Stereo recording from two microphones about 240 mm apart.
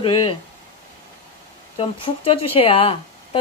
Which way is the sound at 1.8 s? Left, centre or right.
Left.